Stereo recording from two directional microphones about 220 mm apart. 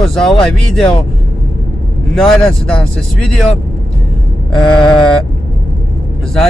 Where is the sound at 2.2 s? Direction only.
5° left (ahead or behind).